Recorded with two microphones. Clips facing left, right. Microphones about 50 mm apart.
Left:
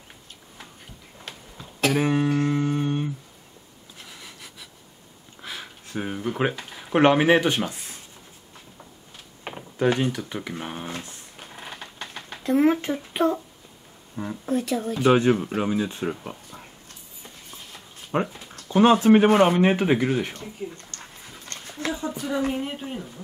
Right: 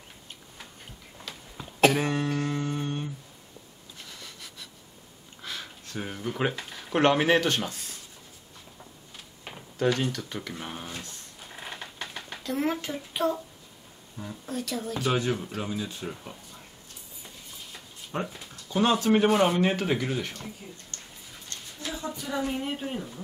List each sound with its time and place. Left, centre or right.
1.3 s cough: left
1.9 s a sound: centre
6.6 s speech: centre
9.5 s a sound: centre
9.9 s speech: centre
11.4 s mechanisms: centre
12.4 s speech: left
18.1 s speech: left
21.5 s a sound: left
22.5 s speech: centre